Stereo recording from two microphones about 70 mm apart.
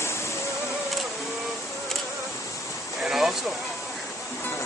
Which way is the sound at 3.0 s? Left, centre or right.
Centre.